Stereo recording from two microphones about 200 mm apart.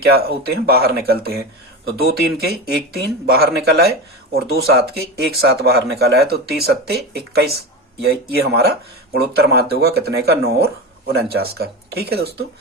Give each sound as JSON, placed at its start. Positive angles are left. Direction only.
{"t": 0.0, "sound": "speech", "side_deg": -50}